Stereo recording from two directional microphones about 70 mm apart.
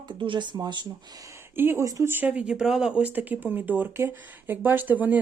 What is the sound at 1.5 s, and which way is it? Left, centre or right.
Speech, right.